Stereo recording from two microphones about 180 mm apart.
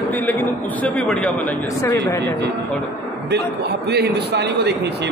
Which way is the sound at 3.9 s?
65° right (ahead or behind).